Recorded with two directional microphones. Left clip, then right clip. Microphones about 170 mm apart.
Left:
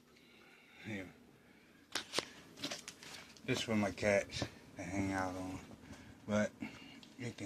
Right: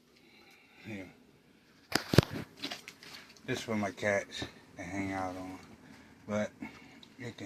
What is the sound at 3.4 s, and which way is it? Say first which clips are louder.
Speech: right 2 dB; 10° left (ahead or behind).